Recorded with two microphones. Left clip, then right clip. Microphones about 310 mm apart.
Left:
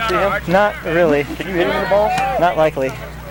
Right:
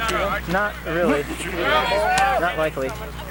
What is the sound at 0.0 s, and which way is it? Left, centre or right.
Speech, centre.